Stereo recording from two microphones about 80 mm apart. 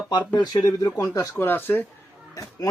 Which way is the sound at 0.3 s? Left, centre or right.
Left.